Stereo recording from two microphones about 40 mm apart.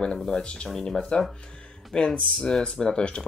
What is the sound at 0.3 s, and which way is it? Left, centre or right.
Speech, left.